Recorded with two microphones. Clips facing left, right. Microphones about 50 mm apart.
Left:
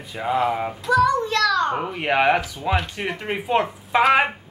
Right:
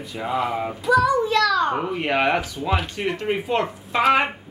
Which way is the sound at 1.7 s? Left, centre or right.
Centre.